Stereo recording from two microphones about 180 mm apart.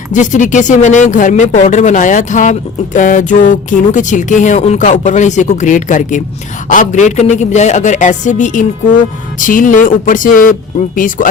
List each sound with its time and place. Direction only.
0.1 s speech: 45° left (ahead or behind)